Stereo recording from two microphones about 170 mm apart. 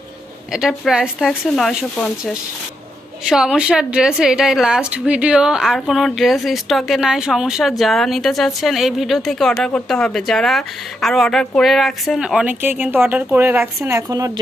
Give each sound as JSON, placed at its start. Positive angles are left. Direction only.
{"t": 0.5, "sound": "a woman's voice", "side_deg": 0}